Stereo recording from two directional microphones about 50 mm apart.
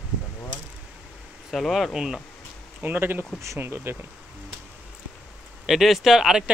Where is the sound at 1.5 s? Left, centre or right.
Centre.